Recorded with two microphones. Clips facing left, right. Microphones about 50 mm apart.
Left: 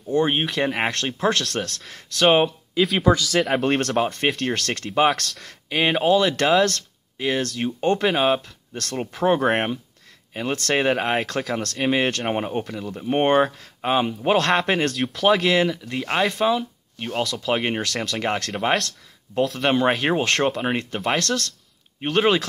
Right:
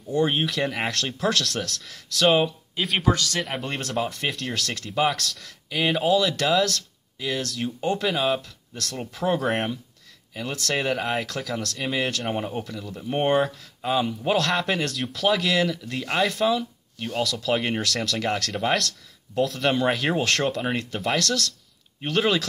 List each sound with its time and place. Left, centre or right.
0.1 s speech: left
3.3 s speech: left
4.0 s speech: left
15.7 s speech: left